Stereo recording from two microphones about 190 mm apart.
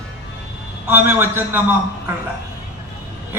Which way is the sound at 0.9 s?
10° right (ahead or behind).